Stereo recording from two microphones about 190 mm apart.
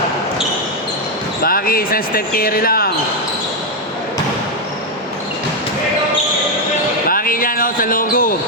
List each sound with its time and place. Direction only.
1.5 s speech: 50° left (ahead or behind)
7.1 s basketball bounce: 50° left (ahead or behind)